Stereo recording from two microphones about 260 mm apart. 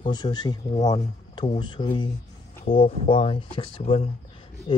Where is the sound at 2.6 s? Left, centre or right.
Left.